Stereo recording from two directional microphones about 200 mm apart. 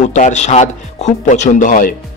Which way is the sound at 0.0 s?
35° left (ahead or behind).